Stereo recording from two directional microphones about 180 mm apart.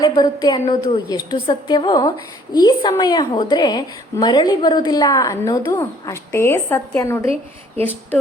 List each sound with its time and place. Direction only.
0.0 s a woman's voice: 20° left (ahead or behind)